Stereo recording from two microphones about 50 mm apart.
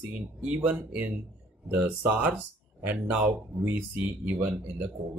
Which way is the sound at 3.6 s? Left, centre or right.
Right.